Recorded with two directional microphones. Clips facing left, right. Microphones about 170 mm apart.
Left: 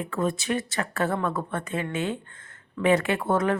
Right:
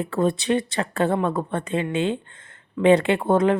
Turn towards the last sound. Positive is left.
turn(degrees=-25)  # may be behind; listen again after turning